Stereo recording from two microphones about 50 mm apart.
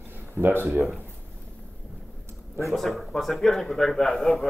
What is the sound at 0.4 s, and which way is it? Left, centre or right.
Speech, right.